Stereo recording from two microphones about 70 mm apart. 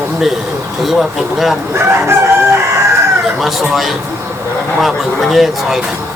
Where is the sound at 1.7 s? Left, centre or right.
Right.